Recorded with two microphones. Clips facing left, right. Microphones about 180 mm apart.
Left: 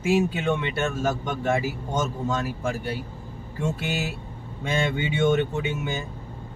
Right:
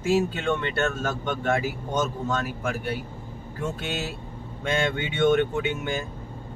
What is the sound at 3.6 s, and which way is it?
Speech, 5° left (ahead or behind).